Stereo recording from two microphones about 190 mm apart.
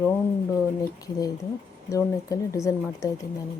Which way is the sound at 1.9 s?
15° left (ahead or behind).